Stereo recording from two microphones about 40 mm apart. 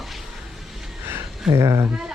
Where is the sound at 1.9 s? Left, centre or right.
Centre.